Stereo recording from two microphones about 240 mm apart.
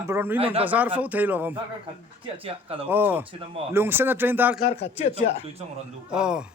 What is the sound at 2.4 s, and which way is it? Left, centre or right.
Speech, right.